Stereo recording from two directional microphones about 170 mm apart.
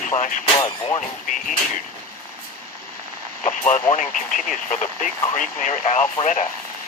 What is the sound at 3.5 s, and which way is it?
Speech, 40° left (ahead or behind).